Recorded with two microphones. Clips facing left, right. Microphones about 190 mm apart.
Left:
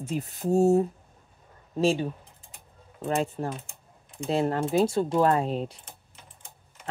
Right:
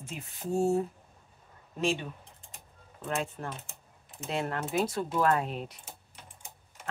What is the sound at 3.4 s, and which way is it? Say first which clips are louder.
Speech: left 7 dB; 30° left (ahead or behind).